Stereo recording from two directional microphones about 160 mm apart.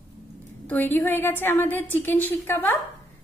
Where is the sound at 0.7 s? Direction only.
10° left (ahead or behind).